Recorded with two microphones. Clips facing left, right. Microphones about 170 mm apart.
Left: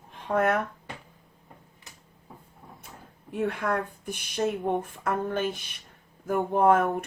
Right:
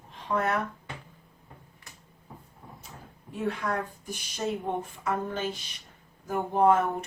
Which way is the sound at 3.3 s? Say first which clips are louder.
Left 3 dB; 60° left (ahead or behind).